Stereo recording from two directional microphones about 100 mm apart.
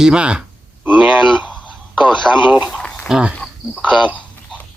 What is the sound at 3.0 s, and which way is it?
Speech, 5° right (ahead or behind).